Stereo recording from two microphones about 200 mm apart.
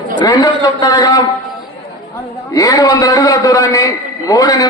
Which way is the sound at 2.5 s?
15° left (ahead or behind).